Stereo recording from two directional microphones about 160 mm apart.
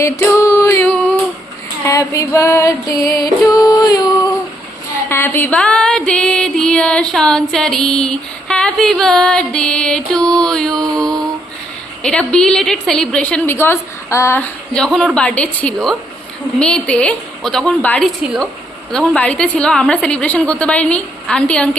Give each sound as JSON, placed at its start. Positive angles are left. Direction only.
{"t": 0.0, "sound": "female singing", "side_deg": 15}
{"t": 1.9, "sound": "music", "side_deg": 20}
{"t": 3.5, "sound": "a sound", "side_deg": 25}
{"t": 5.0, "sound": "music", "side_deg": 15}
{"t": 10.8, "sound": "mantra", "side_deg": -25}
{"t": 12.0, "sound": "a woman's voice", "side_deg": 5}